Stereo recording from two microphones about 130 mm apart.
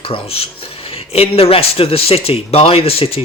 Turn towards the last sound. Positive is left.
turn(degrees=50)  # may be behind; listen again after turning